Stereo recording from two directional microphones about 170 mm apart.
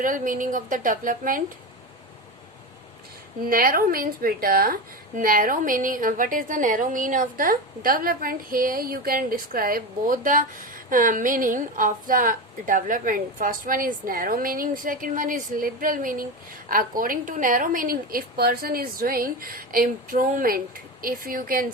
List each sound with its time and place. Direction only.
0.0 s a woman's voice: 50° right (ahead or behind)
3.4 s a woman's voice: 60° right (ahead or behind)